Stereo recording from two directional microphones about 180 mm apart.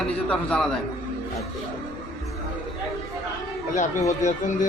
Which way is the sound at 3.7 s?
45° left (ahead or behind).